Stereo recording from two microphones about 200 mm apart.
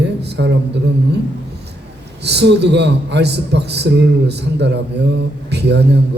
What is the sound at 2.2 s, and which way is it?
A man's voice, 55° right (ahead or behind).